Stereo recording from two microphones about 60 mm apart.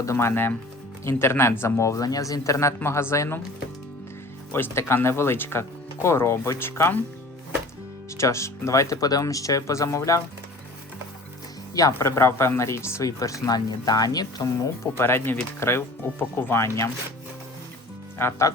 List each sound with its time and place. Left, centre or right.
0.0 s speech: left
4.5 s speech: left
8.2 s speech: left
11.7 s speech: left
11.9 s speech: left
14.9 s speech: left
16.6 s speech: left
18.2 s speech: left